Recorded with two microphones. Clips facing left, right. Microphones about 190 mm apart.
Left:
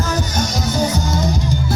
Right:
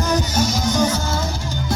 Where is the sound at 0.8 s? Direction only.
10° left (ahead or behind).